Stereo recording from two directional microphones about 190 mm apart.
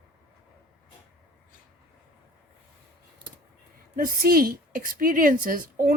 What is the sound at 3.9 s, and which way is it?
A woman's voice, 50° right (ahead or behind).